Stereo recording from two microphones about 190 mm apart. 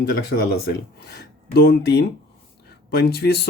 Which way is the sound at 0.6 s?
55° left (ahead or behind).